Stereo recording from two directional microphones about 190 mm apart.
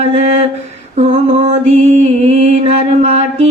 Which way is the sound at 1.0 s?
35° right (ahead or behind).